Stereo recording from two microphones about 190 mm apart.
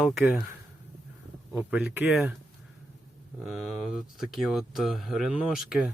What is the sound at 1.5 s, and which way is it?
Speech, 5° right (ahead or behind).